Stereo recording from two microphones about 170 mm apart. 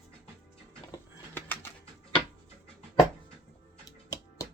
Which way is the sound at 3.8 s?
20° left (ahead or behind).